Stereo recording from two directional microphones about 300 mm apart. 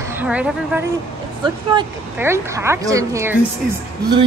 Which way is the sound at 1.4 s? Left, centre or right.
Centre.